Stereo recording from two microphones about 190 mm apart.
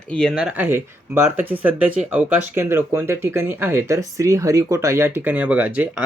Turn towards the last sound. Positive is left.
turn(degrees=-10)  # may be behind; listen again after turning